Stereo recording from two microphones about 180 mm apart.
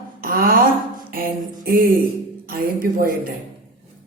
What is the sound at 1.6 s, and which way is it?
A woman's voice, 55° right (ahead or behind).